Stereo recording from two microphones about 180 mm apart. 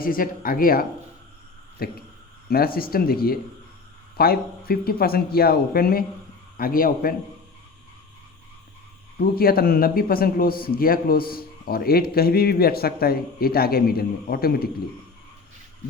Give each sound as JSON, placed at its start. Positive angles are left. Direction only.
{"t": 0.0, "sound": "a man's voice", "side_deg": 50}
{"t": 9.2, "sound": "a man's voice", "side_deg": 55}